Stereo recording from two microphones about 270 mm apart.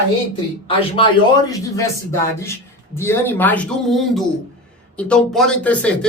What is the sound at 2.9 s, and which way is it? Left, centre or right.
Speech, centre.